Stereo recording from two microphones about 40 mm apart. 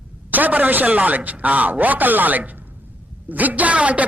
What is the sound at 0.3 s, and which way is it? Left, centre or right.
A man's voice, right.